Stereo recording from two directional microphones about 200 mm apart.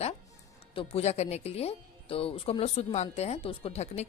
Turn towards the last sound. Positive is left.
turn(degrees=30)  # may be behind; listen again after turning